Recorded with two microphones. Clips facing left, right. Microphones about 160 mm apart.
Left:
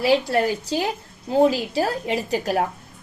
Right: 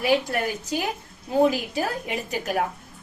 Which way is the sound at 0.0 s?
30° left (ahead or behind).